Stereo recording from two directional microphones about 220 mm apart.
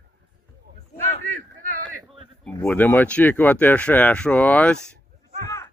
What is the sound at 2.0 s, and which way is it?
Speech, centre (ahead or behind).